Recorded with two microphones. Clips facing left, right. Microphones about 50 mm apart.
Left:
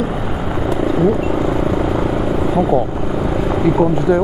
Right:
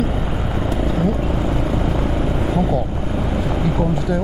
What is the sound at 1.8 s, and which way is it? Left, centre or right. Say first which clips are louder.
Vehicle: left 4 dB; left.